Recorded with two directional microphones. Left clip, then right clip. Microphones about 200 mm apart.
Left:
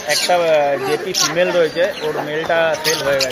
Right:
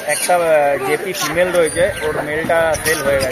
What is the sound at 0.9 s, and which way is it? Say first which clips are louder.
Speech: left 1 dB; 60° left (ahead or behind).